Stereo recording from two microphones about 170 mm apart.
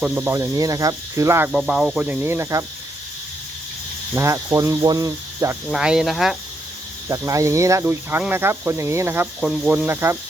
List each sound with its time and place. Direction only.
0.0 s speech: 10° right (ahead or behind)
1.5 s speech: centre (ahead or behind)
4.1 s speech: 15° right (ahead or behind)
5.7 s speech: 5° right (ahead or behind)
7.1 s speech: 20° right (ahead or behind)